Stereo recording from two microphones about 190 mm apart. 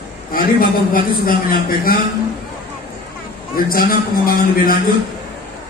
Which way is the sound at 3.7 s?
50° left (ahead or behind).